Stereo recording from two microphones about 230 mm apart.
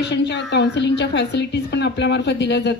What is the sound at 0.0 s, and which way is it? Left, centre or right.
A woman's voice, left.